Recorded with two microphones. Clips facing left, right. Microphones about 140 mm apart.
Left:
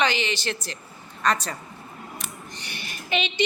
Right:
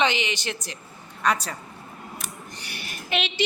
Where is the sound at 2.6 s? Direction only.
5° right (ahead or behind).